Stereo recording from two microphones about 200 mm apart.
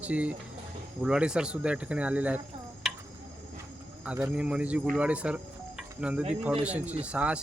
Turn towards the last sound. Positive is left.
turn(degrees=-5)  # may be behind; listen again after turning